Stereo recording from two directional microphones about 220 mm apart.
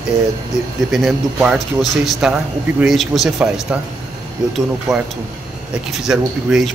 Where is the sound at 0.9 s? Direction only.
Centre (ahead or behind).